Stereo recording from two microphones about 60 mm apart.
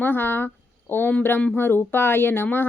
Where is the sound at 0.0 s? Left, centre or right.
Left.